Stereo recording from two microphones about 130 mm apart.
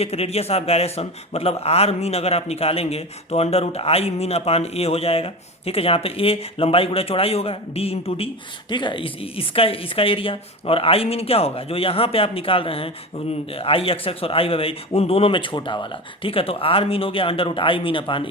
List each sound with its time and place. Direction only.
0.0 s speech: 55° left (ahead or behind)
8.7 s speech: 40° left (ahead or behind)